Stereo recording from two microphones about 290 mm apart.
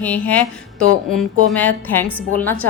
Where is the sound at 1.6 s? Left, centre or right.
Centre.